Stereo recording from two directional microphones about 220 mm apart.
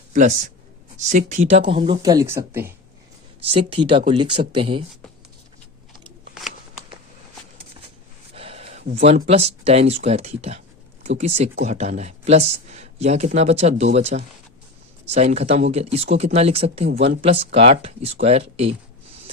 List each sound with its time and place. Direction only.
0.1 s speech: 35° right (ahead or behind); by 2.7 s 10° right (ahead or behind)
3.5 s speech: 25° right (ahead or behind)
8.3 s a sound: 25° right (ahead or behind)
9.0 s speech: 30° right (ahead or behind)